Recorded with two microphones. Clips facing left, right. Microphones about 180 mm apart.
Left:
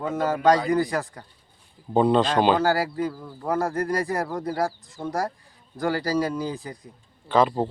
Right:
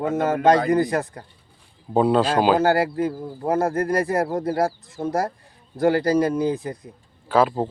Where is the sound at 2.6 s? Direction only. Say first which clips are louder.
Right 4 dB; 45° right (ahead or behind).